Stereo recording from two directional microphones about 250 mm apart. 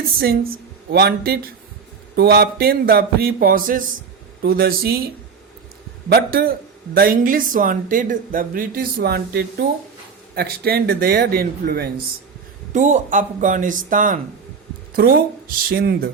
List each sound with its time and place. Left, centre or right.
0.2 s a woman's voice: right
6.1 s speech: right